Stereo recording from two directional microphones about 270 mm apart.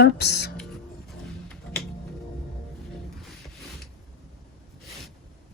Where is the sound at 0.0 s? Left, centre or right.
Left.